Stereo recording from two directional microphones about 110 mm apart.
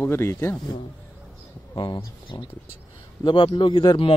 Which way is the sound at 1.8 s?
50° left (ahead or behind).